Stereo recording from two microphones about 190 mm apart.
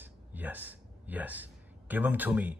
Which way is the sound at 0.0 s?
10° right (ahead or behind).